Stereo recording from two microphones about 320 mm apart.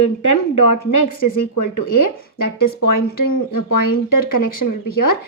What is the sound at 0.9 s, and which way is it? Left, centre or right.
A woman's voice, left.